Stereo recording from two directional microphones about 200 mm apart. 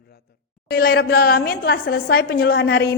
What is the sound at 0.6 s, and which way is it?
A woman's voice, 50° left (ahead or behind).